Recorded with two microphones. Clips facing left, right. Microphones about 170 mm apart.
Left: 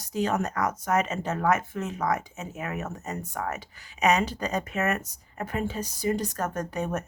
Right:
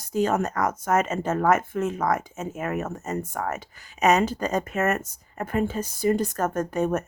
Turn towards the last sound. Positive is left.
turn(degrees=-50)  # may be behind; listen again after turning